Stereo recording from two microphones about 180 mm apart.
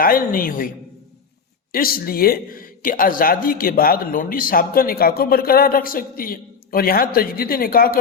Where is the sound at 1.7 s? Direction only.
55° left (ahead or behind).